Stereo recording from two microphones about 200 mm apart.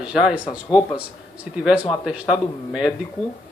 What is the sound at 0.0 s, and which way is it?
Speech, 5° right (ahead or behind).